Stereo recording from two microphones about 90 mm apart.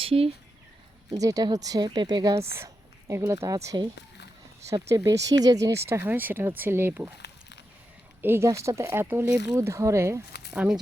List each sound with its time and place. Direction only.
0.0 s speech: 90° right
1.1 s speech: 45° right (ahead or behind)
2.6 s a woman's voice: 35° right (ahead or behind)
5.7 s speech: 30° right (ahead or behind)
8.2 s speech: 25° right (ahead or behind)
8.9 s speech: 25° right (ahead or behind)
9.5 s speech: 35° right (ahead or behind)
10.5 s speech: 15° right (ahead or behind)